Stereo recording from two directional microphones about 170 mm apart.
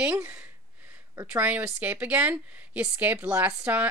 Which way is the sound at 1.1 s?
10° right (ahead or behind).